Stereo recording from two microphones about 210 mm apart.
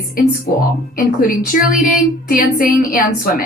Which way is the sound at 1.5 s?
40° left (ahead or behind).